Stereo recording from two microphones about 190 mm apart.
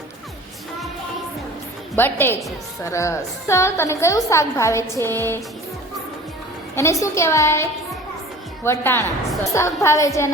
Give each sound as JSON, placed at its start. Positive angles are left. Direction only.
{"t": 2.0, "sound": "a woman's voice", "side_deg": 10}
{"t": 6.7, "sound": "a woman's voice", "side_deg": 15}